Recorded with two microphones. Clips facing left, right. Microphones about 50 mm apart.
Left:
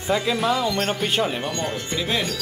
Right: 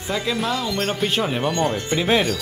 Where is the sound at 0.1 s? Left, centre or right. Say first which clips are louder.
Left 2 dB; centre.